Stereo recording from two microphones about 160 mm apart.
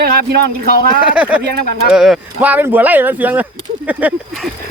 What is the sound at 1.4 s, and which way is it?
Speech, 90° right.